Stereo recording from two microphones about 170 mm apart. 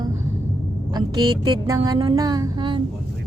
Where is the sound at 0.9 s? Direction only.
25° right (ahead or behind).